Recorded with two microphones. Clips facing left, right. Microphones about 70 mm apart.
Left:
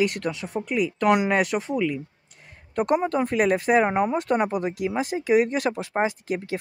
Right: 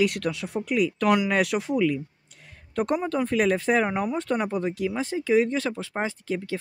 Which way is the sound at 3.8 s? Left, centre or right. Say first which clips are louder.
Left 4 dB; left.